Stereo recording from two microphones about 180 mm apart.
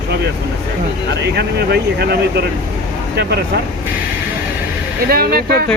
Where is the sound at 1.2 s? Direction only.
65° right (ahead or behind).